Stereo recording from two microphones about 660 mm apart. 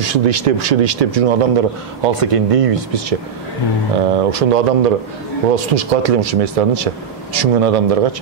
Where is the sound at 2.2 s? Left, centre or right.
Right.